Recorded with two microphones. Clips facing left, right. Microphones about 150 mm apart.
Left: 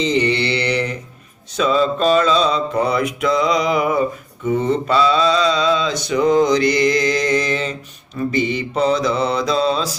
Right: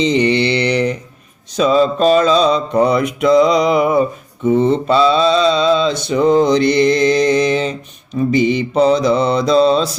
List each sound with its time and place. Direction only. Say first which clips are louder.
0.2 s mantra: right 4 dB; 30° right (ahead or behind)